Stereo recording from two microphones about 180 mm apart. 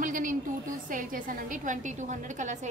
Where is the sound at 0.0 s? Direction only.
45° right (ahead or behind).